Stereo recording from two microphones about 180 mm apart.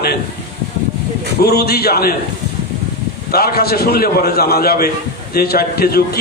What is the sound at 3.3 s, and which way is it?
A man's voice, 60° left (ahead or behind).